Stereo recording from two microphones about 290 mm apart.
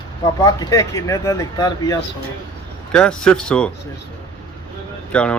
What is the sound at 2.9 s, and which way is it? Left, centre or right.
Speech, centre.